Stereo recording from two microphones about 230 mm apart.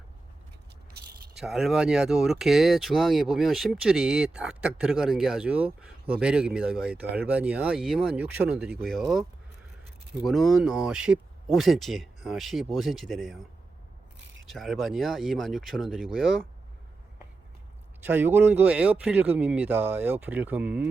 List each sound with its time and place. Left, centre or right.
0.9 s scrape: right
1.4 s speech: centre
10.2 s speech: centre
14.4 s speech: centre
18.0 s speech: centre